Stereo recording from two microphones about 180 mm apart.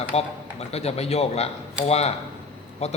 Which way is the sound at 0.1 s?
35° left (ahead or behind).